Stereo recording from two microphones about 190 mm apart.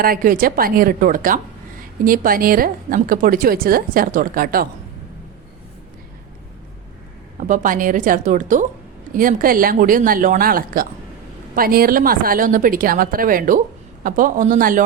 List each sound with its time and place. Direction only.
0.0 s a woman's voice: 50° right (ahead or behind)
7.3 s a woman's voice: 40° right (ahead or behind)